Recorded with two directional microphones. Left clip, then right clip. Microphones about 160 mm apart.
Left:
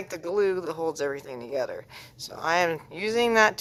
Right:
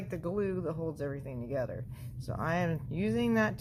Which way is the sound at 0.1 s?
30° left (ahead or behind).